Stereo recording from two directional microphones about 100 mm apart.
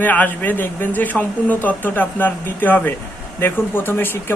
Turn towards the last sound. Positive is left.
turn(degrees=20)  # may be behind; listen again after turning